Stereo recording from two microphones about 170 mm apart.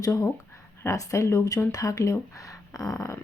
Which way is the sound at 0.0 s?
20° left (ahead or behind).